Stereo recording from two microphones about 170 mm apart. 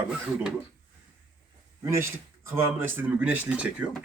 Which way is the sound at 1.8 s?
15° right (ahead or behind).